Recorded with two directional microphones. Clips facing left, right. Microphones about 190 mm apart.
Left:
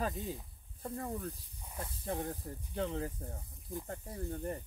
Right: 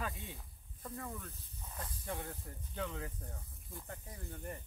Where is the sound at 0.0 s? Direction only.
40° left (ahead or behind).